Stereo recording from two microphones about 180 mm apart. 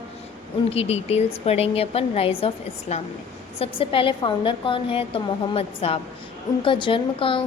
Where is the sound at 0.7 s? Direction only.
35° left (ahead or behind).